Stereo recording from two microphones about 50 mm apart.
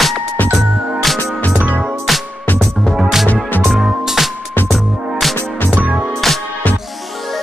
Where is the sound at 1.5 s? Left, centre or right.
Right.